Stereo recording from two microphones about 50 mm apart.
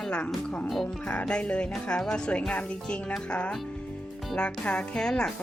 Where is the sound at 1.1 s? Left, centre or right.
Left.